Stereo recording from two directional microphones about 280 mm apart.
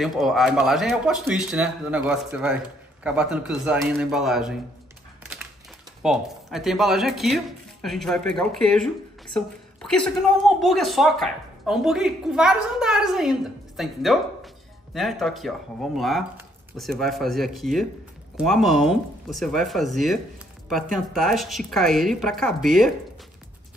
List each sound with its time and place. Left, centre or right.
0.0 s a woman's voice: centre
6.0 s a woman's voice: centre